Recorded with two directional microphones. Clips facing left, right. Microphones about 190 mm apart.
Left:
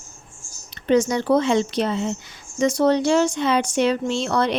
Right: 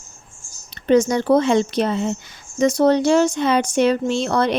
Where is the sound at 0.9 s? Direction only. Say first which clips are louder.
Right 3 dB; 45° right (ahead or behind).